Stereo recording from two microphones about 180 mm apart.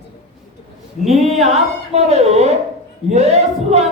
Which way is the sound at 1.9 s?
35° right (ahead or behind).